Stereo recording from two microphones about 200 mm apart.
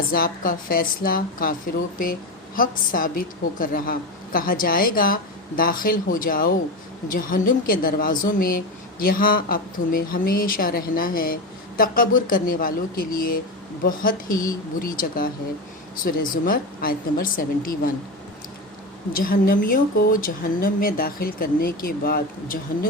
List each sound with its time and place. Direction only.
0.1 s speech: 45° left (ahead or behind)
2.6 s speech: 45° left (ahead or behind)
19.1 s speech: 45° left (ahead or behind)